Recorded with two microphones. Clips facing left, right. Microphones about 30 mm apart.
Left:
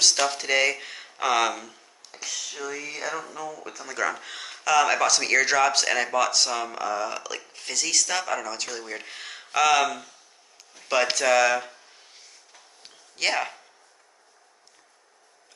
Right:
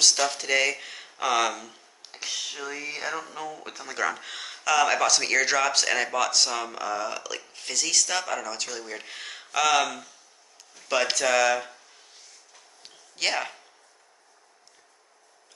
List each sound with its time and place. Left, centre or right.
0.2 s speech: centre
2.0 s speech: right
3.3 s speech: right
4.1 s speech: centre
12.8 s a sound: centre